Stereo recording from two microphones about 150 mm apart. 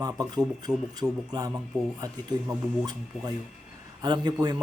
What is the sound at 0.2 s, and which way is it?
Speech, 25° right (ahead or behind).